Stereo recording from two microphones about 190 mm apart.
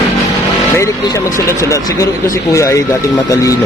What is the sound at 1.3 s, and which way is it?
Speech, 15° left (ahead or behind).